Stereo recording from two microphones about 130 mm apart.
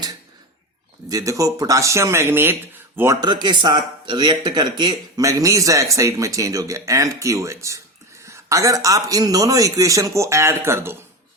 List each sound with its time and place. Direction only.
1.0 s speech: 25° right (ahead or behind)
3.2 s speech: 35° right (ahead or behind); by 10.9 s 20° right (ahead or behind)